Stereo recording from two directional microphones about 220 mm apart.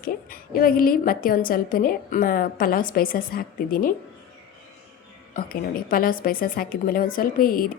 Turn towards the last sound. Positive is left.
turn(degrees=40)  # may be behind; listen again after turning